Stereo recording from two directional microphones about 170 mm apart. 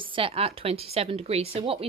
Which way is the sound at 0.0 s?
30° right (ahead or behind).